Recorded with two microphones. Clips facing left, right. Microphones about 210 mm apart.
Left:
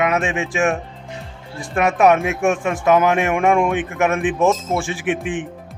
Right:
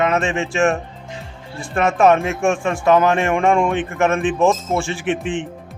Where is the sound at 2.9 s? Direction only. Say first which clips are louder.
Right 1 dB; 15° left (ahead or behind).